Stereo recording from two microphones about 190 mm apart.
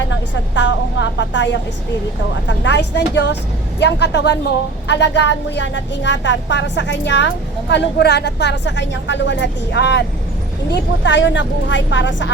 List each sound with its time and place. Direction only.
0.1 s a woman's voice: 75° left (ahead or behind)